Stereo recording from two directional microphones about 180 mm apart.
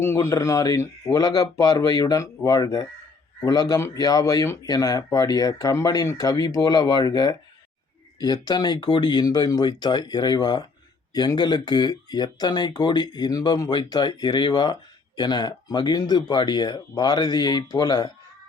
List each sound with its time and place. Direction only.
0.0 s speech: 15° left (ahead or behind)